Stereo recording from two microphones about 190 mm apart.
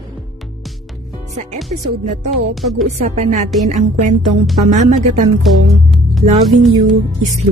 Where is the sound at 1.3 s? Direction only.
35° right (ahead or behind).